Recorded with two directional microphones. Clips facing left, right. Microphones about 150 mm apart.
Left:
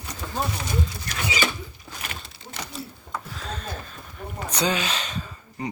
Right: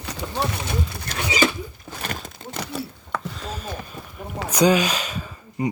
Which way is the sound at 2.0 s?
50° right (ahead or behind).